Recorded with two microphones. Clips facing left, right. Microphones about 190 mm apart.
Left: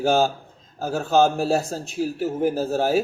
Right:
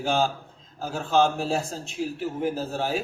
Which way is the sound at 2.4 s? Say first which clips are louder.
Left 6 dB; 45° left (ahead or behind).